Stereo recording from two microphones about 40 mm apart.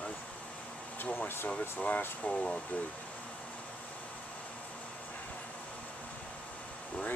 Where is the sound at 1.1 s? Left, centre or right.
Left.